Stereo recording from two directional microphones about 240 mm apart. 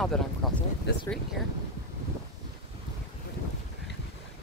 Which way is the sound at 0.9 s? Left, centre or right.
Left.